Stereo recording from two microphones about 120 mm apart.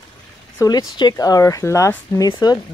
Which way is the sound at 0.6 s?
35° left (ahead or behind).